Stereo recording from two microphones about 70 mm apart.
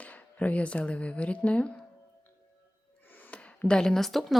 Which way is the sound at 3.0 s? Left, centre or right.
Left.